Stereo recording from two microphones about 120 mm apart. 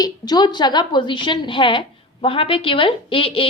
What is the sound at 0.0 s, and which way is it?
A woman's voice, 35° left (ahead or behind).